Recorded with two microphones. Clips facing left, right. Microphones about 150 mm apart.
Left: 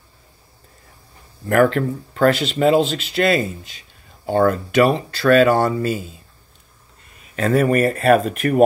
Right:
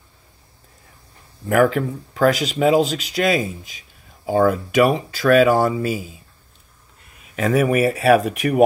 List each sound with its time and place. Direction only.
1.4 s speech: 5° right (ahead or behind)
7.2 s speech: 5° right (ahead or behind)